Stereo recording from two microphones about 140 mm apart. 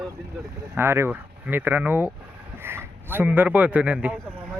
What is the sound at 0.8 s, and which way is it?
A man's voice, 15° right (ahead or behind).